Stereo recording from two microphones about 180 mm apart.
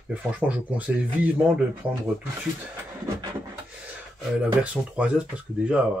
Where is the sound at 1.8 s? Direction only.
30° right (ahead or behind).